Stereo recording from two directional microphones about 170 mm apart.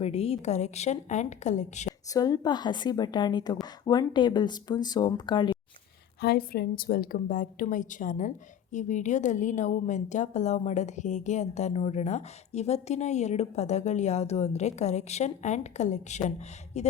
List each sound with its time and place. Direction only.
0.0 s a woman's voice: 35° left (ahead or behind)
2.1 s speech: 20° left (ahead or behind)
6.2 s a woman's voice: 65° left (ahead or behind); by 16.9 s 40° left (ahead or behind)